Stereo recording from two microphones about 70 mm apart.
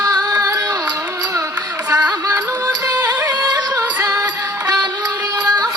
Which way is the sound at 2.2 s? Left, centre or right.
Right.